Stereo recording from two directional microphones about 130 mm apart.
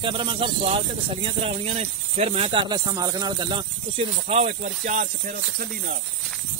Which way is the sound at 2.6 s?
30° right (ahead or behind).